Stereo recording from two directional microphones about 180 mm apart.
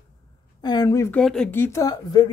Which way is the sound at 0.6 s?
20° left (ahead or behind).